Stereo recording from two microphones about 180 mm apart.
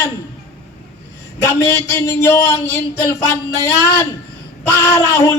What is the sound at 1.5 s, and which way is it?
Speech, 15° left (ahead or behind).